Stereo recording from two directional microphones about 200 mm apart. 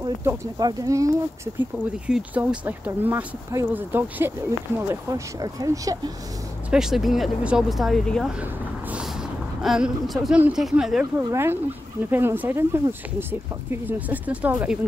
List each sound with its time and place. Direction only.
0.0 s speech: 15° right (ahead or behind)
6.7 s speech: centre (ahead or behind)
9.6 s speech: centre (ahead or behind)